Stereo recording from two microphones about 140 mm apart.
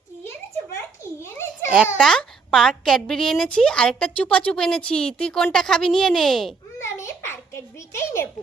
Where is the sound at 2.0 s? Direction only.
5° left (ahead or behind).